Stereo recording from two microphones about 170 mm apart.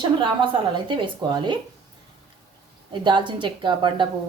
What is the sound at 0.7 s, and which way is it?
Speech, 30° right (ahead or behind).